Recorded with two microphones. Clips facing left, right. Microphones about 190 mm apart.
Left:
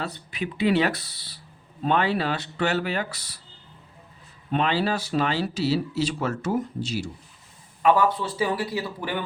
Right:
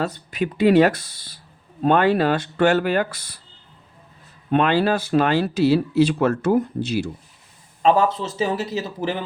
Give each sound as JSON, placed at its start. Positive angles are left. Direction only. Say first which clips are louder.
{"t": 0.0, "sound": "speech", "louder": "right 7 dB", "side_deg": -45}
{"t": 4.5, "sound": "speech", "louder": "right 6 dB", "side_deg": -55}
{"t": 7.8, "sound": "speech", "louder": "right 3 dB", "side_deg": -25}